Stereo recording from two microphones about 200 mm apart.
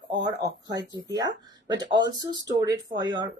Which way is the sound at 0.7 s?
20° right (ahead or behind).